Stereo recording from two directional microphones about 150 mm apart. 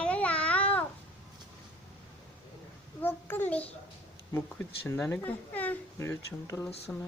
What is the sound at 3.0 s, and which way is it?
Speech, 15° left (ahead or behind).